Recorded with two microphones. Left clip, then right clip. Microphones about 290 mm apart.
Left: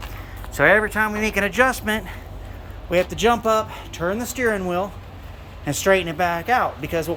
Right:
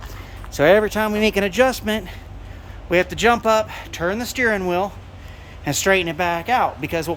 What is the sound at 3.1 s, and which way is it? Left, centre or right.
Speech, centre.